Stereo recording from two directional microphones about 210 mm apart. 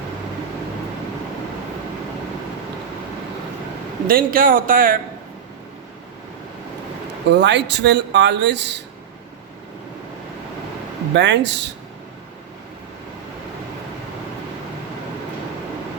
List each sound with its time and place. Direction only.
4.0 s a man's voice: 40° right (ahead or behind)
7.3 s speech: 55° right (ahead or behind)
11.1 s speech: 55° right (ahead or behind)